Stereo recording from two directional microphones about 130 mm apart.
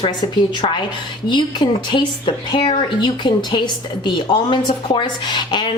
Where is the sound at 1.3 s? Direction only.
35° left (ahead or behind).